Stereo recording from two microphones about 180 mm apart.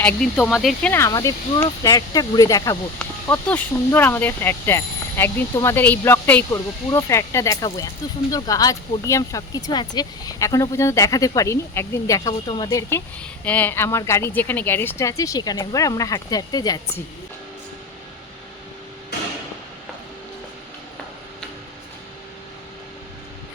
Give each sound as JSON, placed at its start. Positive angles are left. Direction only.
{"t": 0.0, "sound": "speech", "side_deg": 5}
{"t": 13.4, "sound": "speech", "side_deg": 10}